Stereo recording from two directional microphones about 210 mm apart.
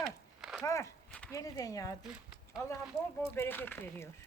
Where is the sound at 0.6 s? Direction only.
15° left (ahead or behind).